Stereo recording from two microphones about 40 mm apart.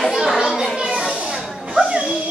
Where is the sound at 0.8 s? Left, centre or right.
Right.